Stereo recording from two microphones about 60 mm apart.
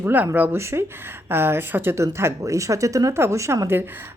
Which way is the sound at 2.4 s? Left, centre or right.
Right.